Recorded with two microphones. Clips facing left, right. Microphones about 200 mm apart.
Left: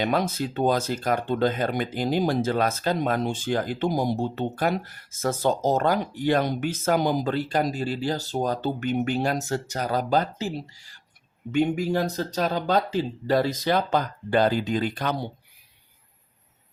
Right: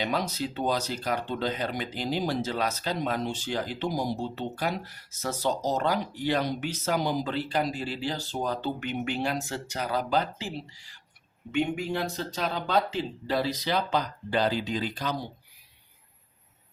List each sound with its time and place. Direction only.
0.0 s speech: 50° left (ahead or behind)